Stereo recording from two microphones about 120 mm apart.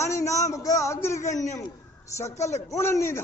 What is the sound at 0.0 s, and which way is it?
A man's voice, 25° left (ahead or behind).